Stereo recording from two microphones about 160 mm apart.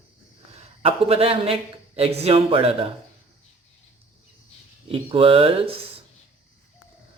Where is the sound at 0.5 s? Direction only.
40° right (ahead or behind).